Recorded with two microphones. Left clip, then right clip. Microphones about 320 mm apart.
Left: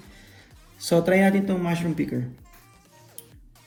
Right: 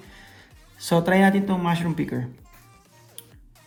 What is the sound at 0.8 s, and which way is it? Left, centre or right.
Speech, centre.